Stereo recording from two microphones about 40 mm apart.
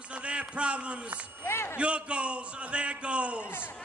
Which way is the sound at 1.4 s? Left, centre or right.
Left.